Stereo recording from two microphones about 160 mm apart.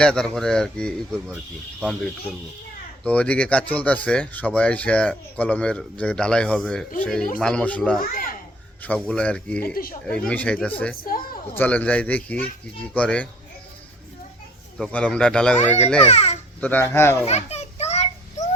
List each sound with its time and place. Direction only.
0.0 s speech: 5° left (ahead or behind)
3.0 s speech: 10° left (ahead or behind)
8.1 s a sound: 60° left (ahead or behind)
9.0 s speech: 5° left (ahead or behind)
9.7 s speech: 65° left (ahead or behind)
10.1 s speech: 5° left (ahead or behind)
14.8 s speech: 5° left (ahead or behind)
16.0 s babbling: 40° left (ahead or behind)
16.6 s speech: 10° left (ahead or behind)
17.2 s children playing: 45° left (ahead or behind)